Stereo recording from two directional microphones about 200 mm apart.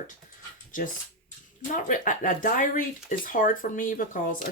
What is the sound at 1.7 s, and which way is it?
Speech, 40° left (ahead or behind).